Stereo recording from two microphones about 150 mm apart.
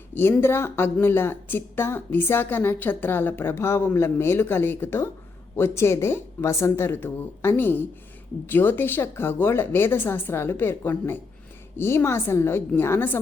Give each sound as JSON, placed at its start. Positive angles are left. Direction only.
{"t": 0.1, "sound": "a woman's voice", "side_deg": 15}